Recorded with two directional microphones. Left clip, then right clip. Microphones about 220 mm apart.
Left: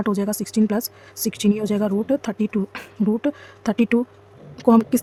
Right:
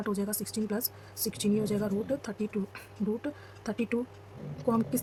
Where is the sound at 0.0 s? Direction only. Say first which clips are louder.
Left 10 dB; 45° left (ahead or behind).